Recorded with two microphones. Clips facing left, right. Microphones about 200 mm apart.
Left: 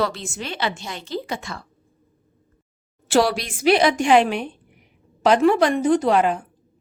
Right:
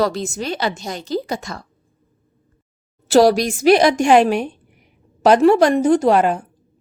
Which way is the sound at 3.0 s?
40° right (ahead or behind).